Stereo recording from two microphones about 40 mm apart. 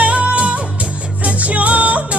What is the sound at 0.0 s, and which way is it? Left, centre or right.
Music, right.